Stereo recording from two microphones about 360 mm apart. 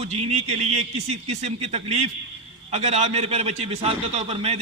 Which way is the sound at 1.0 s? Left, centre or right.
Right.